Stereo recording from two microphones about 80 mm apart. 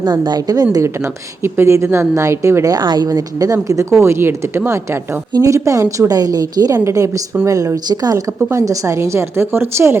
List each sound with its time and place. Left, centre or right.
0.0 s a woman's voice: right
2.7 s a woman's voice: right
4.0 s a woman's voice: right
6.8 s a woman's voice: right